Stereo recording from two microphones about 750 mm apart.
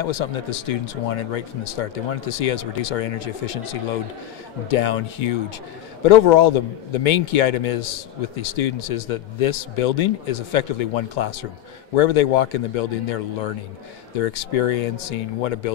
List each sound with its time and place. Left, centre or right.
0.0 s speech: left
4.6 s speech: left